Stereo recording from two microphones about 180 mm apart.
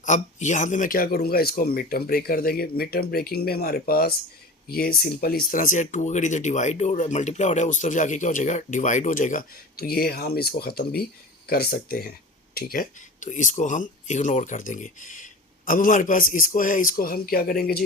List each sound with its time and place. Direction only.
0.0 s speech: 40° left (ahead or behind); by 17.8 s 60° left (ahead or behind)